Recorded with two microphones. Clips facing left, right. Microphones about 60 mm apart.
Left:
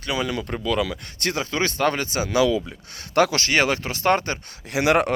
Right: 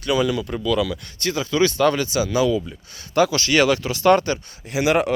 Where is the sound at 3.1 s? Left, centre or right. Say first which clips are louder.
Right 1 dB; left.